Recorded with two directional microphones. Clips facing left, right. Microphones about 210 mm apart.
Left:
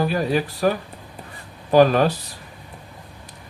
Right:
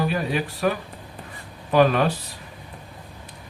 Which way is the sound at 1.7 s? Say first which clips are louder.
Left 3 dB; 35° left (ahead or behind).